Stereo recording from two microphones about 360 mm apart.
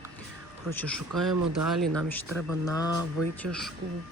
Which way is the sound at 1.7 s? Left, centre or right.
Centre.